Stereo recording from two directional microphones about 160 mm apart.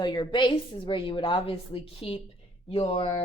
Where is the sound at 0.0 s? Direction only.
25° left (ahead or behind).